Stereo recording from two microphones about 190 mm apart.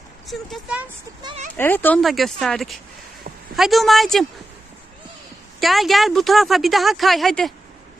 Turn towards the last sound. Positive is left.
turn(degrees=0)  # may be behind; listen again after turning